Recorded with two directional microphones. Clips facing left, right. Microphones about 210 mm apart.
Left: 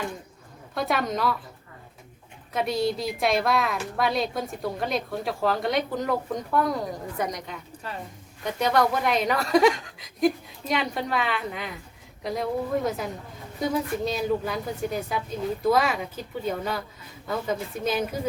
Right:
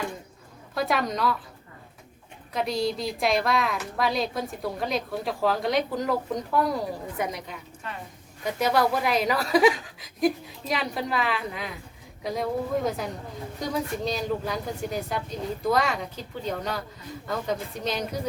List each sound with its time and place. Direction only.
0.7 s a woman's voice: centre (ahead or behind)
2.5 s a woman's voice: centre (ahead or behind)
7.9 s a woman's voice: 35° left (ahead or behind)
8.4 s a woman's voice: 5° right (ahead or behind)